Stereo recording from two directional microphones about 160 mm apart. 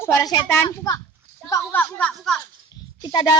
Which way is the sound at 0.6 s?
25° left (ahead or behind).